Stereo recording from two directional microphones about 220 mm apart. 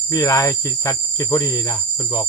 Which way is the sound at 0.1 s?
15° left (ahead or behind).